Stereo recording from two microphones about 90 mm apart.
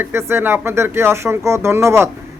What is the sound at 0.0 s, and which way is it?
Speech, 30° right (ahead or behind).